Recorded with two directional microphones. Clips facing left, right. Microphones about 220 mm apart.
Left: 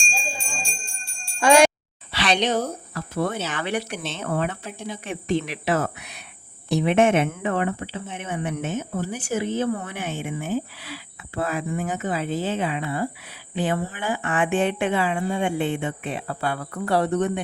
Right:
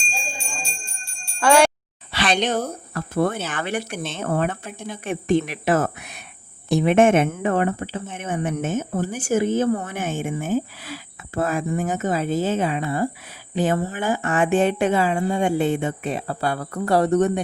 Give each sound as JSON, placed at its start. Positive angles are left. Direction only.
{"t": 1.4, "sound": "jingle bell", "side_deg": 15}
{"t": 2.1, "sound": "a sound", "side_deg": -50}
{"t": 2.9, "sound": "speech", "side_deg": -55}